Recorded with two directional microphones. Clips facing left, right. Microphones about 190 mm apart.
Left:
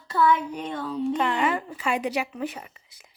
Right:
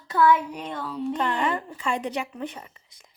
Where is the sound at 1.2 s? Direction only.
10° left (ahead or behind).